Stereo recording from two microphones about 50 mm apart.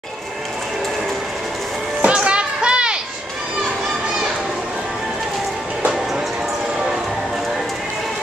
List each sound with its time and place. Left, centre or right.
2.0 s children playing: right